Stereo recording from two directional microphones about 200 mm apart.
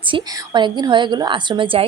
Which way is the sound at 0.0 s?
25° right (ahead or behind).